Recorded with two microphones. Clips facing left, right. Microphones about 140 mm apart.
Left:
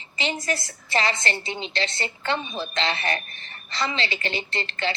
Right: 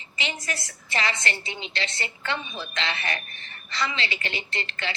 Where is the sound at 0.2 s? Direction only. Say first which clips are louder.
Left 5 dB; 35° left (ahead or behind).